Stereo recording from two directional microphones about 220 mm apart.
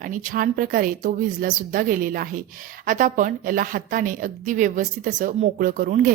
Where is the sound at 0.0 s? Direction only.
35° right (ahead or behind).